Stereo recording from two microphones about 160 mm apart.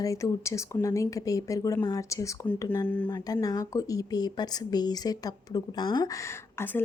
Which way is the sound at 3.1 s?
25° left (ahead or behind).